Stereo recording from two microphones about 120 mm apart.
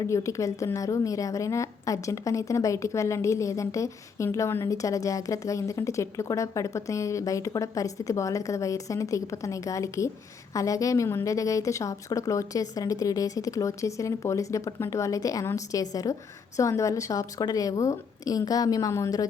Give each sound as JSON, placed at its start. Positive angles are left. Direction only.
{"t": 0.0, "sound": "a woman's voice", "side_deg": 25}